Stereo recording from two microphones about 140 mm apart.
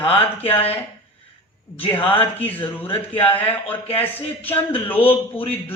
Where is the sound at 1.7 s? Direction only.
40° left (ahead or behind).